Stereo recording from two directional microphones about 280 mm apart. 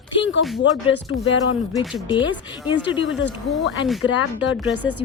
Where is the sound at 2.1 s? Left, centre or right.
Centre.